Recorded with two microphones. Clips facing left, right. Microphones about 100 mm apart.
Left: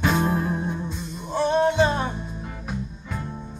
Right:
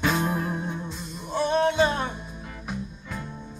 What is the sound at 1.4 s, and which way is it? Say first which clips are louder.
Music: left 2 dB; 15° left (ahead or behind).